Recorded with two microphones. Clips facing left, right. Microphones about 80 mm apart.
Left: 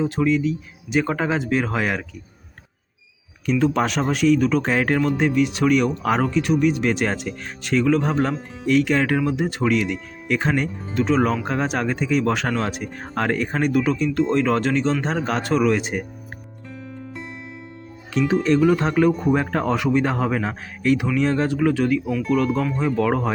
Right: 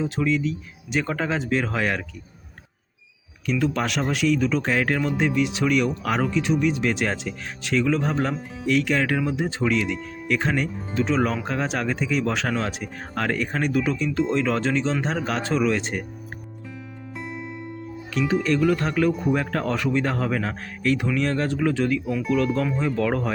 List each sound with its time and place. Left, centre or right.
0.0 s speech: centre
3.5 s speech: centre
5.1 s speech: centre
14.1 s speech: centre
14.3 s speech: centre
16.6 s music: centre
18.3 s speech: left; by 22.1 s centre
22.1 s speech: centre